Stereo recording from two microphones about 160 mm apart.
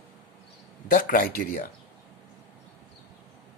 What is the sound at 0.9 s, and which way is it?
Speech, 60° left (ahead or behind).